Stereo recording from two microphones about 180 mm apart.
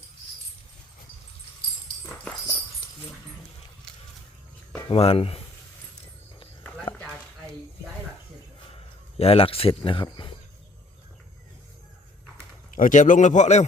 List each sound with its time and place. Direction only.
4.9 s speech: 30° left (ahead or behind)
6.9 s a sound: 30° left (ahead or behind)
9.1 s speech: 35° left (ahead or behind)
12.7 s a man's voice: 45° left (ahead or behind)